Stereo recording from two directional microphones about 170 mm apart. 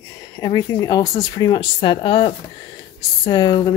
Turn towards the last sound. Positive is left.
turn(degrees=20)  # may be behind; listen again after turning